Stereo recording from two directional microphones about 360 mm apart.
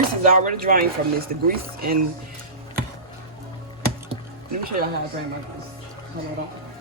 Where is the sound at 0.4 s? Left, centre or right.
Right.